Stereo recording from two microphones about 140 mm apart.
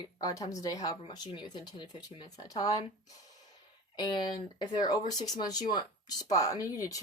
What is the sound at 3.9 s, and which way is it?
Speech, 30° left (ahead or behind).